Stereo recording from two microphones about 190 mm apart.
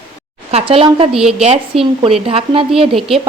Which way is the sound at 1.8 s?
30° right (ahead or behind).